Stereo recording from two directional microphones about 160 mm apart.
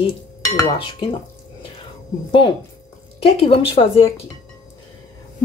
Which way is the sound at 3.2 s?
35° left (ahead or behind).